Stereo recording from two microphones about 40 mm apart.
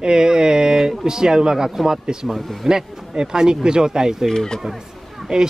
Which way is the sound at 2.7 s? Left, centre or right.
Centre.